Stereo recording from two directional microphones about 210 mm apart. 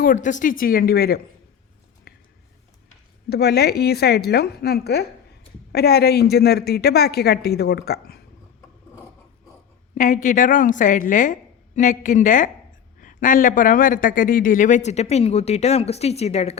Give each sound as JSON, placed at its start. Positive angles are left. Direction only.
{"t": 0.0, "sound": "a man's voice", "side_deg": 40}
{"t": 2.1, "sound": "a sound", "side_deg": 45}
{"t": 3.2, "sound": "a woman's voice", "side_deg": 50}
{"t": 9.9, "sound": "a man's voice", "side_deg": 40}